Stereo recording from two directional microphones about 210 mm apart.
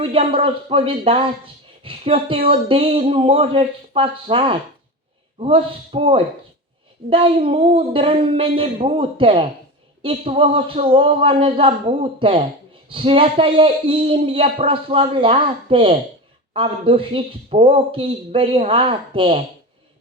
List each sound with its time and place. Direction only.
0.0 s a man's voice: 25° right (ahead or behind)